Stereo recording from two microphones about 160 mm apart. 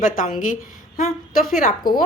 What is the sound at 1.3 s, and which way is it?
Speech, 60° left (ahead or behind).